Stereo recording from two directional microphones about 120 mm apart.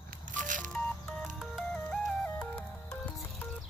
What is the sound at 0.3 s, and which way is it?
Telephone dialing, 90° right.